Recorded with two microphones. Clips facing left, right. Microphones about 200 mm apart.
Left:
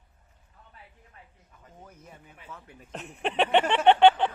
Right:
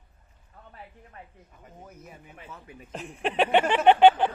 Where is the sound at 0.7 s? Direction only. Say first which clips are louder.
Right 8 dB; 60° right (ahead or behind).